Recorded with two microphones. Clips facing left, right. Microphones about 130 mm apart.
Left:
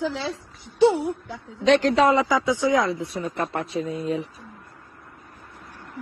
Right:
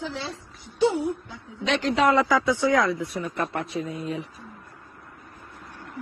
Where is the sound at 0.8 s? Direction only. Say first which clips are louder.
Left 4 dB; 80° left.